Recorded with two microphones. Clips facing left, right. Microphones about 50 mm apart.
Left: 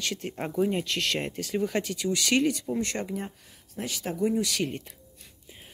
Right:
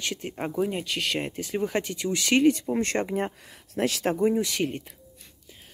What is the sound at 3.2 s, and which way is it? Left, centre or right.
Speech, right.